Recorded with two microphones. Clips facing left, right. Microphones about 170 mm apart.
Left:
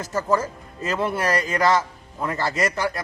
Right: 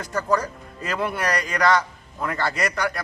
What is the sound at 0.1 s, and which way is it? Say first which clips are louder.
Speech: left 1 dB; 25° left (ahead or behind).